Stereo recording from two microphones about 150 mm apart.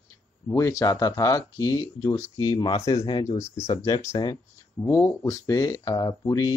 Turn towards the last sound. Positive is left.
turn(degrees=20)  # may be behind; listen again after turning